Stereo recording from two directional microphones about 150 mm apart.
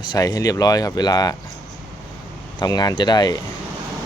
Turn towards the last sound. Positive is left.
turn(degrees=30)  # may be behind; listen again after turning